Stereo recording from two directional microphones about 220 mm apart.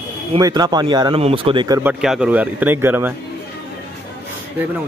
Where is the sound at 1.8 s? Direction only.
5° right (ahead or behind).